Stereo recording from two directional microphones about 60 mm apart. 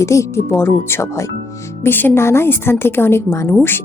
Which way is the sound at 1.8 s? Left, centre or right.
Left.